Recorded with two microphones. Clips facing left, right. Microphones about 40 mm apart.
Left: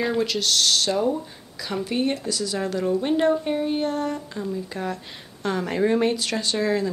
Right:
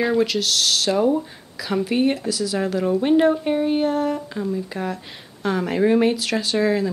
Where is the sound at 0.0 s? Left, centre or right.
Centre.